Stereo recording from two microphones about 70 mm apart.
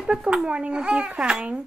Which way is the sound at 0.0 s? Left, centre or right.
Centre.